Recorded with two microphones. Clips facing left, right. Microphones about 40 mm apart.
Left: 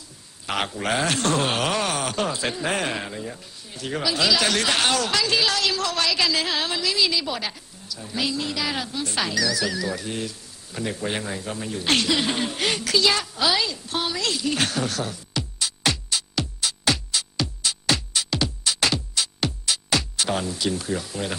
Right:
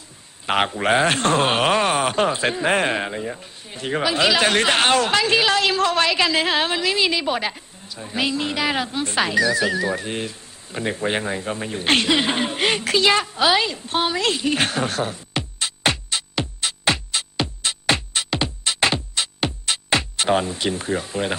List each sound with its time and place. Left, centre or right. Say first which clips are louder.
0.4 s a man's voice: right 6 dB; right